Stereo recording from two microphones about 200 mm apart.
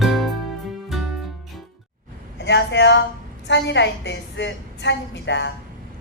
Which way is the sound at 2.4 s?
60° left (ahead or behind).